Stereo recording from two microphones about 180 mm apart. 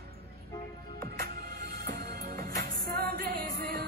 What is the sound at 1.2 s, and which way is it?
Music, 60° right (ahead or behind).